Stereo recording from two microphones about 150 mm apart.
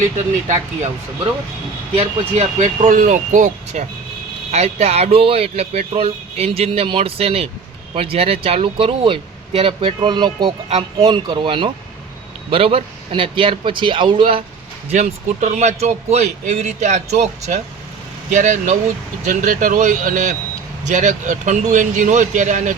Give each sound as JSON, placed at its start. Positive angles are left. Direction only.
{"t": 0.4, "sound": "a man's voice", "side_deg": -55}
{"t": 2.0, "sound": "a man's voice", "side_deg": -45}
{"t": 2.9, "sound": "speech", "side_deg": -60}
{"t": 14.8, "sound": "a man's voice", "side_deg": -55}